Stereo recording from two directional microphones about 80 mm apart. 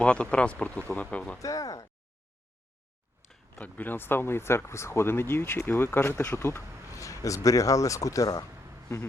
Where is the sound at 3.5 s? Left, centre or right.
Left.